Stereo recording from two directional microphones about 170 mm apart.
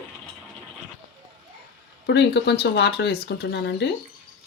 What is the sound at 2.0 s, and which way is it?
Speech, 75° left (ahead or behind).